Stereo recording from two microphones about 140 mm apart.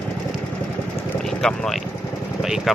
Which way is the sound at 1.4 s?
Centre (ahead or behind).